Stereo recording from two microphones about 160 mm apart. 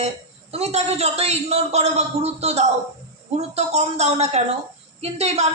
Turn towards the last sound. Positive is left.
turn(degrees=-40)  # may be behind; listen again after turning